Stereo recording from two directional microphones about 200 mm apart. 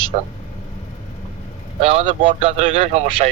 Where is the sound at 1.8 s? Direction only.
30° right (ahead or behind).